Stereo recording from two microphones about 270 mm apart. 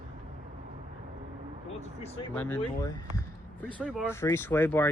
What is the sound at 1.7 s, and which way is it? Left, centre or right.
Speech, left.